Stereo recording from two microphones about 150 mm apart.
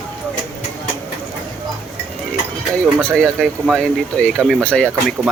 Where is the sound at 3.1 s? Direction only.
Centre (ahead or behind).